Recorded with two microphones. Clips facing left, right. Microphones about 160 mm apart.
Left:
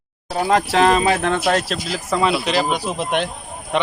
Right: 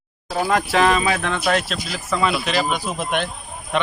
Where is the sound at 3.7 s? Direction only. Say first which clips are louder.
Left 2 dB; 20° left (ahead or behind).